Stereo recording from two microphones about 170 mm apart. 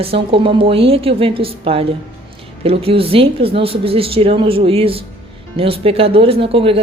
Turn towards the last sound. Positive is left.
turn(degrees=-35)  # may be behind; listen again after turning